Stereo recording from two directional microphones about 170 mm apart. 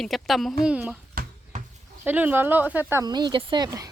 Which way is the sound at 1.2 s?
60° right (ahead or behind).